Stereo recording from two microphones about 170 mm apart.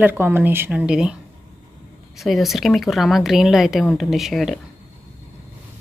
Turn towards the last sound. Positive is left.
turn(degrees=0)  # may be behind; listen again after turning